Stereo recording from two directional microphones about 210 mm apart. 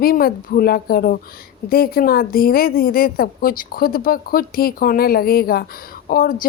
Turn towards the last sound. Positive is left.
turn(degrees=40)  # may be behind; listen again after turning